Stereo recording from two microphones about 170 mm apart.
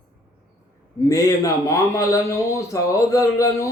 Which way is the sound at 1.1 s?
20° left (ahead or behind).